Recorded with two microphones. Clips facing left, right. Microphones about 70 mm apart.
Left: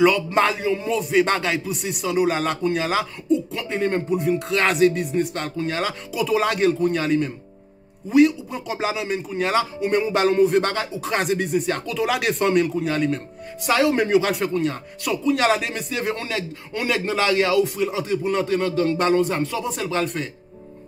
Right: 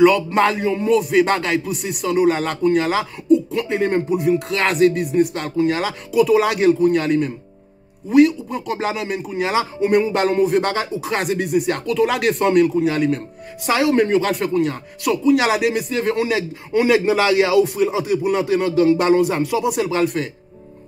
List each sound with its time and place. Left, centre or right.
0.0 s a man's voice: centre